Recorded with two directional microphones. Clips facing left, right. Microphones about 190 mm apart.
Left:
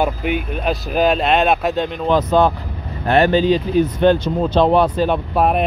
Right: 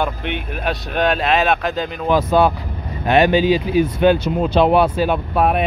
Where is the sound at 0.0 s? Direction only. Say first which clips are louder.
Left 3 dB; 5° left (ahead or behind).